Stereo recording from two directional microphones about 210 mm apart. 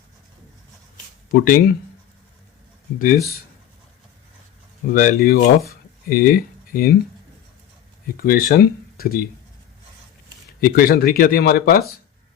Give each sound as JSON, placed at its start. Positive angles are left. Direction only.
{"t": 1.3, "sound": "speech", "side_deg": 45}
{"t": 4.9, "sound": "speech", "side_deg": 45}
{"t": 8.0, "sound": "speech", "side_deg": 45}
{"t": 10.6, "sound": "speech", "side_deg": 45}